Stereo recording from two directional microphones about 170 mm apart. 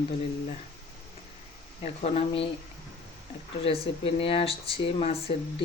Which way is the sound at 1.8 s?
40° left (ahead or behind).